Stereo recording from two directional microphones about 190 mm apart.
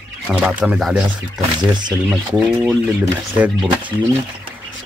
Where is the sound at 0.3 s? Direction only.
Centre (ahead or behind).